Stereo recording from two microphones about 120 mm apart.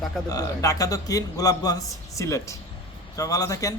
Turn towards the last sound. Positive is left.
turn(degrees=30)  # may be behind; listen again after turning